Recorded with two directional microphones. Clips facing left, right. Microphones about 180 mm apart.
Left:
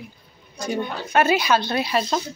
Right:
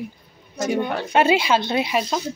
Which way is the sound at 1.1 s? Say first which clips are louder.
Right 1 dB; 25° right (ahead or behind).